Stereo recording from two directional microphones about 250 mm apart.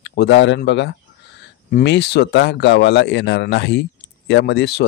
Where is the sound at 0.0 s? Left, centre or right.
Left.